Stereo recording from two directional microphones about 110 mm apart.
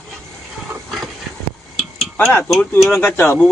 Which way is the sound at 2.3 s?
25° left (ahead or behind).